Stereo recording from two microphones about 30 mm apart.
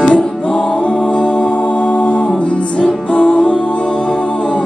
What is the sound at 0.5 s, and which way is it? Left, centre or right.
Music, left.